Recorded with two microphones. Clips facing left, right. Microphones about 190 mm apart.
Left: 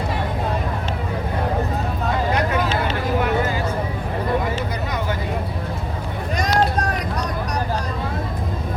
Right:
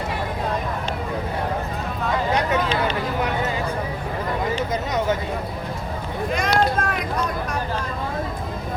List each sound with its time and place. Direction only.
6.3 s vehicle: 35° left (ahead or behind)